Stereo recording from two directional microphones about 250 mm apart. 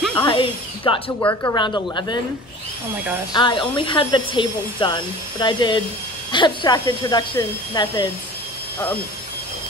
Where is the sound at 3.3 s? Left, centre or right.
Centre.